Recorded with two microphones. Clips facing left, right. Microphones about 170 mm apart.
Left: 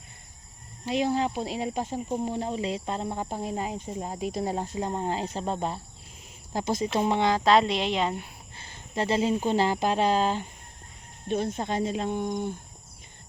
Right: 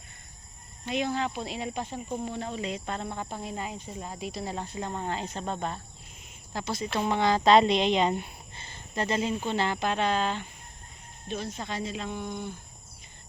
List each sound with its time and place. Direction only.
0.9 s speech: 35° left (ahead or behind)
6.5 s speech: 45° left (ahead or behind)
6.8 s speech: 20° left (ahead or behind)
7.3 s a woman's voice: centre (ahead or behind)
9.0 s speech: 30° left (ahead or behind)
11.3 s speech: 50° left (ahead or behind)